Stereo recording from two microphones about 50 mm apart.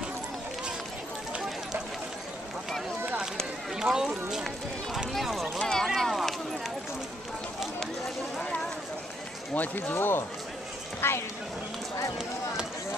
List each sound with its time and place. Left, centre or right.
3.7 s speech: centre
5.6 s a sound: centre
9.9 s speech: left